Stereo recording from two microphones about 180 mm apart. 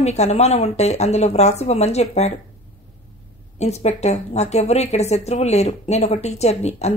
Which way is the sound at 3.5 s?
40° left (ahead or behind).